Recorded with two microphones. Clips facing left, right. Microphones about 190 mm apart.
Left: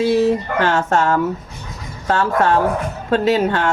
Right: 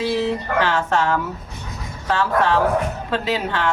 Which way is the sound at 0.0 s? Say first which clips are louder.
Left 6 dB; 45° left (ahead or behind).